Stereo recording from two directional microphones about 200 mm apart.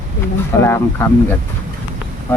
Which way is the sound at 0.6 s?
10° left (ahead or behind).